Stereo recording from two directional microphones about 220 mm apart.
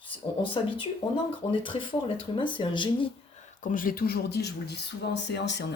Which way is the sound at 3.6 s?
35° left (ahead or behind).